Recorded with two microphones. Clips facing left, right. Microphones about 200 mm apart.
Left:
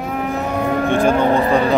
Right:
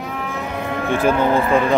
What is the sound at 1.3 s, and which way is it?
Speech, 35° left (ahead or behind).